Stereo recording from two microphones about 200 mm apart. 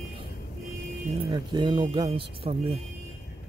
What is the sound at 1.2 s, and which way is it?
Speech, 20° right (ahead or behind).